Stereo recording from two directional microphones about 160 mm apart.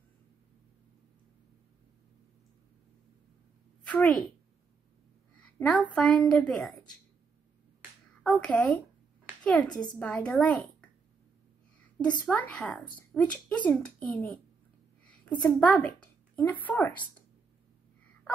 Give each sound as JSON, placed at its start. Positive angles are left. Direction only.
{"t": 3.8, "sound": "a woman's voice", "side_deg": 10}
{"t": 5.6, "sound": "a child's voice", "side_deg": 10}
{"t": 8.2, "sound": "a child's voice", "side_deg": 5}
{"t": 9.7, "sound": "a woman's voice", "side_deg": 25}
{"t": 9.9, "sound": "a child's voice", "side_deg": 5}
{"t": 12.5, "sound": "a child's voice", "side_deg": 5}